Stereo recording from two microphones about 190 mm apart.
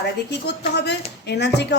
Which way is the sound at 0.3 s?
60° left (ahead or behind).